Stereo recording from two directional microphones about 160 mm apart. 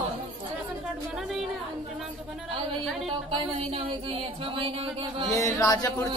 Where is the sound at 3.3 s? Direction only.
35° right (ahead or behind).